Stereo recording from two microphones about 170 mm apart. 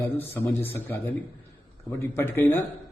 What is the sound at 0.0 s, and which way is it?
A man's voice, 15° left (ahead or behind).